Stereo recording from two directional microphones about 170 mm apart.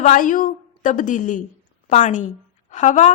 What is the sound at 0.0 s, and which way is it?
A woman's voice, 50° left (ahead or behind).